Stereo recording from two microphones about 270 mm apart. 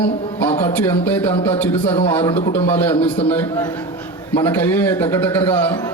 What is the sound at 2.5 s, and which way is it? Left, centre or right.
A man's voice, centre.